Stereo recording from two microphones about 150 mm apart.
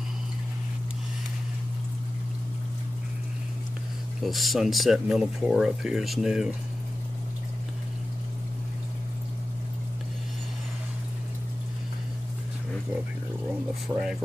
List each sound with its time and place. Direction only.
4.2 s speech: centre (ahead or behind)
13.9 s speech: 20° right (ahead or behind)